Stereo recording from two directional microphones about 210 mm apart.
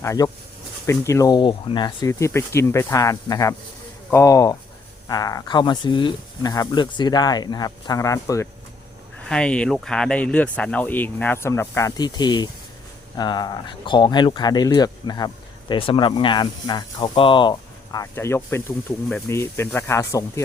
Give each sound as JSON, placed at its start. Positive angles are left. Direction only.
{"t": 0.0, "sound": "speech", "side_deg": 15}
{"t": 9.3, "sound": "speech", "side_deg": 5}